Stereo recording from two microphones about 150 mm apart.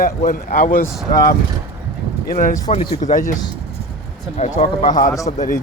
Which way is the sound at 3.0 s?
60° left (ahead or behind).